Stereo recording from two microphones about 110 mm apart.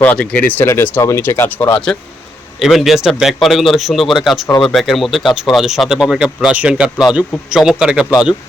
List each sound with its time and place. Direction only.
0.0 s speech: 10° left (ahead or behind)
2.6 s speech: centre (ahead or behind)